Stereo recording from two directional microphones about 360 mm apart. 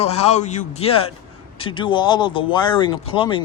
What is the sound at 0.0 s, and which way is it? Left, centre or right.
Speech, centre.